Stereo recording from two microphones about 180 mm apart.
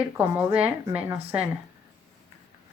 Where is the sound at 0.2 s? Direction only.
10° right (ahead or behind).